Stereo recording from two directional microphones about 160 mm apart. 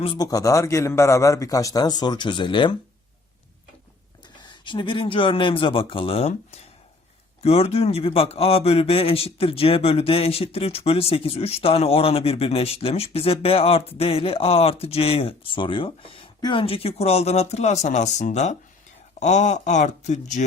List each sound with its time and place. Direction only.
0.0 s a man's voice: 30° left (ahead or behind)
4.2 s a man's voice: 30° left (ahead or behind); by 20.4 s 50° left (ahead or behind)